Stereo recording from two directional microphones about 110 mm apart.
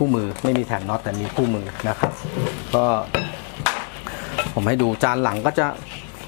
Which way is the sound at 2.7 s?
15° left (ahead or behind).